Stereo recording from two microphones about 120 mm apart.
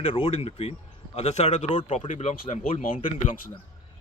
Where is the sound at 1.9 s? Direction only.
70° left (ahead or behind).